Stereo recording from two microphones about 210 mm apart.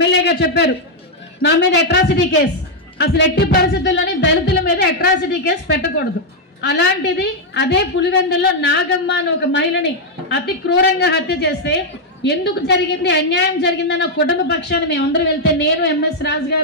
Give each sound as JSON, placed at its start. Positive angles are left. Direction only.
{"t": 0.2, "sound": "a man's voice", "side_deg": 50}